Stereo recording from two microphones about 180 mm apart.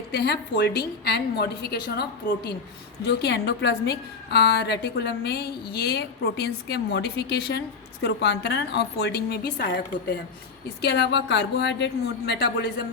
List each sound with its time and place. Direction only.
0.1 s a woman's voice: 65° left (ahead or behind)